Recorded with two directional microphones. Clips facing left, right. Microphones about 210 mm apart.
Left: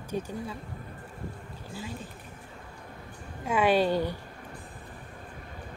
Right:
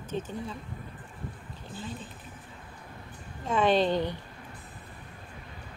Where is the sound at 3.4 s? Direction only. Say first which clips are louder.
Even; 10° left (ahead or behind).